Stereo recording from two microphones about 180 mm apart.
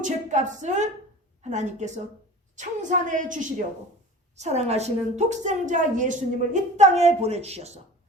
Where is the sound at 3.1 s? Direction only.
45° right (ahead or behind).